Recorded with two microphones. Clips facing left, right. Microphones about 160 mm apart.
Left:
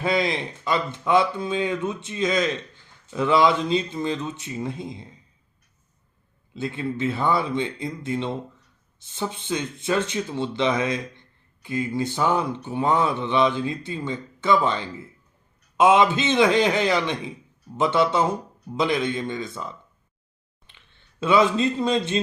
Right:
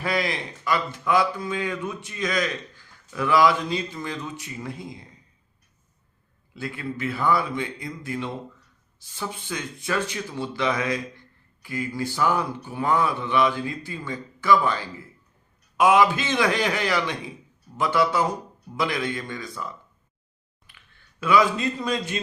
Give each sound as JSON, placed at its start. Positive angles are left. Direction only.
{"t": 0.0, "sound": "speech", "side_deg": 25}
{"t": 6.5, "sound": "speech", "side_deg": 25}
{"t": 20.7, "sound": "speech", "side_deg": 25}